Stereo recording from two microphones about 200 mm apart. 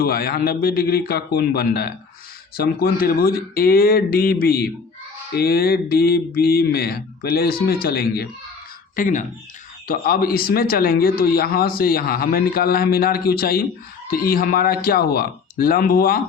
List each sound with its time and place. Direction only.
0.0 s a man's voice: 50° left (ahead or behind)
9.0 s a man's voice: 40° left (ahead or behind)